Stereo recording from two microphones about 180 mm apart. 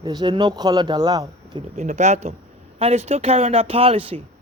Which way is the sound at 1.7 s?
40° right (ahead or behind).